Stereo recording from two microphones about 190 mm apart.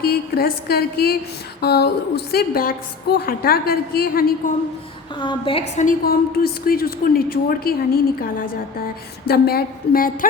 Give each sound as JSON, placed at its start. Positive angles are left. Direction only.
{"t": 0.0, "sound": "a woman's voice", "side_deg": 55}
{"t": 5.2, "sound": "a woman's voice", "side_deg": 25}
{"t": 6.1, "sound": "a woman's voice", "side_deg": 50}